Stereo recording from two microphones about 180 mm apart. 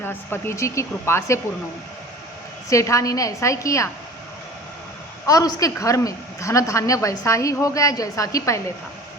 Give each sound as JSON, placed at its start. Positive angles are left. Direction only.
{"t": 0.0, "sound": "speech", "side_deg": 10}
{"t": 2.6, "sound": "speech", "side_deg": 15}
{"t": 5.2, "sound": "a woman's voice", "side_deg": 20}